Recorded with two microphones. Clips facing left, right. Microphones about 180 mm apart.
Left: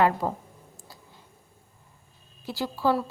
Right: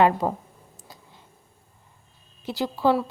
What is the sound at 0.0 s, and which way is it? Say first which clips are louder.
Speech: right 3 dB; 20° right (ahead or behind).